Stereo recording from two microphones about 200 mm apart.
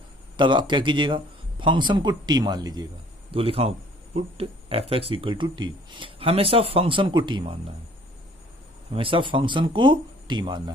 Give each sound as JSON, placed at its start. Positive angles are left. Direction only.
{"t": 0.3, "sound": "speech", "side_deg": -25}
{"t": 8.9, "sound": "speech", "side_deg": -25}